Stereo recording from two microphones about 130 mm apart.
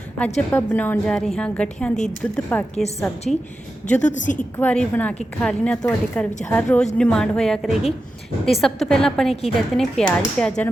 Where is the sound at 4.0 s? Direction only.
70° left (ahead or behind).